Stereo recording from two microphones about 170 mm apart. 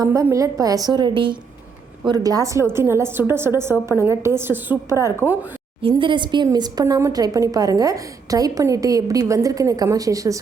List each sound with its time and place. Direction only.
0.0 s a woman's voice: 15° right (ahead or behind)
5.8 s a woman's voice: 30° right (ahead or behind)